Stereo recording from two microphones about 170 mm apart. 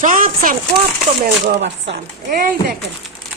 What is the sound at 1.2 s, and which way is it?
Speech, 75° right (ahead or behind).